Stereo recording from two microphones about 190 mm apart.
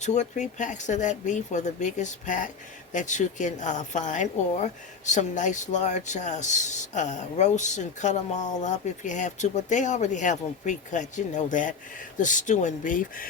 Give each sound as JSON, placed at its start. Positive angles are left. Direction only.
{"t": 0.0, "sound": "speech", "side_deg": 40}